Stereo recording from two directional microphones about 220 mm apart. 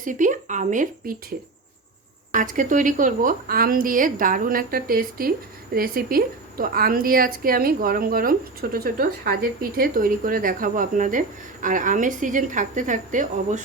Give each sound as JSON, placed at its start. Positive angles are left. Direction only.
{"t": 0.0, "sound": "a woman's voice", "side_deg": -35}
{"t": 2.3, "sound": "a woman's voice", "side_deg": -35}